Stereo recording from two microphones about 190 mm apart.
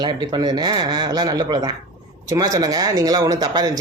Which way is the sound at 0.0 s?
25° right (ahead or behind).